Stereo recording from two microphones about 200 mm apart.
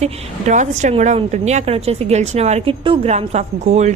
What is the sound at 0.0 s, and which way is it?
A woman's voice, 35° right (ahead or behind).